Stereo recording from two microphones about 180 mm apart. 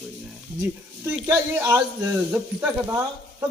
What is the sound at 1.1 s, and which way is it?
Speech, 10° right (ahead or behind).